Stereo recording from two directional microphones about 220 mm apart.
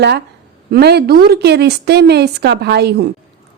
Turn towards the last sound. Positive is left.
turn(degrees=-50)  # may be behind; listen again after turning